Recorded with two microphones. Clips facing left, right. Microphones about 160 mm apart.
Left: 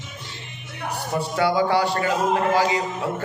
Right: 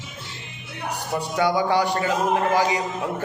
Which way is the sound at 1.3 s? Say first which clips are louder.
Even; 15° right (ahead or behind).